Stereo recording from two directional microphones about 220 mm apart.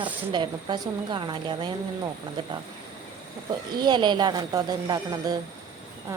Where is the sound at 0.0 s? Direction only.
20° right (ahead or behind).